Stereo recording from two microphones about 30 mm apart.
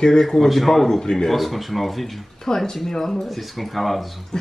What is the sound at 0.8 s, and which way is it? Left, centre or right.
Speech, centre.